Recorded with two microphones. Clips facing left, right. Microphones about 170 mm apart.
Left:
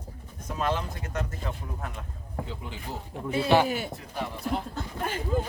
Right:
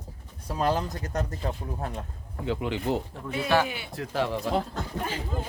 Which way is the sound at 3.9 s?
90° right.